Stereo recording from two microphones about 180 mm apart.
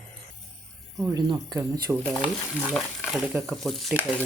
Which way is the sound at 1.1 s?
20° right (ahead or behind).